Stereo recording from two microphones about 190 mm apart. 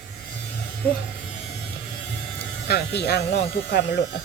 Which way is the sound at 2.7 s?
60° left (ahead or behind).